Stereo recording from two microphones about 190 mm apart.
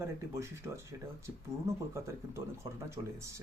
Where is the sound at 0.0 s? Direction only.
15° right (ahead or behind).